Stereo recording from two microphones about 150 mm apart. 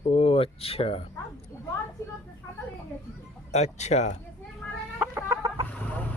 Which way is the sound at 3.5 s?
50° left (ahead or behind).